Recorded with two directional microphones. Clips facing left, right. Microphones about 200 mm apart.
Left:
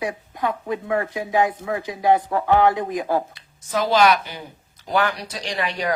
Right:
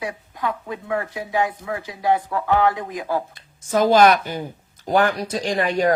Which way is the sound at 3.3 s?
50° right (ahead or behind).